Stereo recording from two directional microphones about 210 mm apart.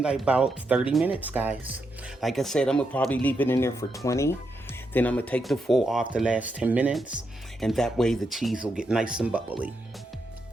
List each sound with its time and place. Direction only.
0.0 s speech: 5° right (ahead or behind)